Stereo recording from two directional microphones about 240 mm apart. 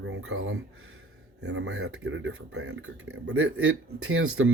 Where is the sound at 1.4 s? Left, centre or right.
Right.